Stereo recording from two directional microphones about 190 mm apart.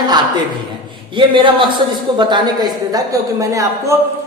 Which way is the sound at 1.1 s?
25° right (ahead or behind).